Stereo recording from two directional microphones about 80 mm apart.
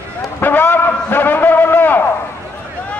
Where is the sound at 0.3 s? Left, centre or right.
Left.